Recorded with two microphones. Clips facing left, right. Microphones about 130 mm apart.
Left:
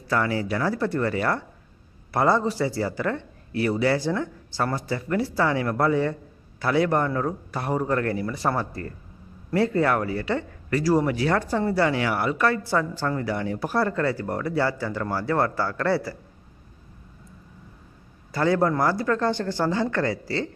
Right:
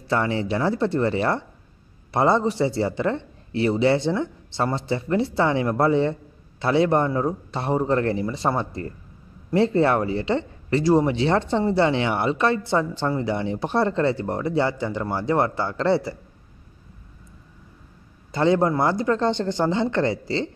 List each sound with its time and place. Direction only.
0.1 s speech: 25° right (ahead or behind)
18.3 s speech: 20° right (ahead or behind)